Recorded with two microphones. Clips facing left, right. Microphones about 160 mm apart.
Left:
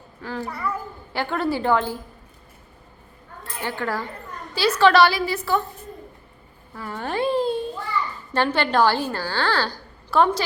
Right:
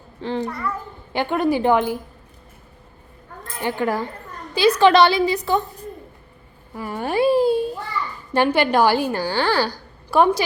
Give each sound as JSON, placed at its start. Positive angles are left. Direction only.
{"t": 0.2, "sound": "a child's voice", "side_deg": -25}
{"t": 0.4, "sound": "a child's voice", "side_deg": 5}
{"t": 1.1, "sound": "a woman's voice", "side_deg": -20}
{"t": 3.6, "sound": "a woman's voice", "side_deg": -15}
{"t": 6.7, "sound": "a sound", "side_deg": -15}
{"t": 8.3, "sound": "a woman's voice", "side_deg": -15}